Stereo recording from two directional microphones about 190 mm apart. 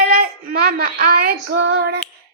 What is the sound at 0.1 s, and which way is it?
Female singing, 50° right (ahead or behind).